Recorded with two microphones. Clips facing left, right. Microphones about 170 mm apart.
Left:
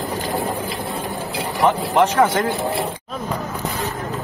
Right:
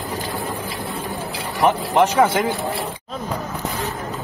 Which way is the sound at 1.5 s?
20° right (ahead or behind).